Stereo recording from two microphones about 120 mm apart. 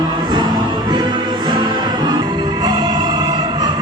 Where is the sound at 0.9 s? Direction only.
40° right (ahead or behind).